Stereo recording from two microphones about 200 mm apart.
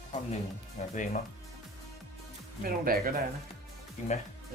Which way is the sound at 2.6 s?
45° right (ahead or behind).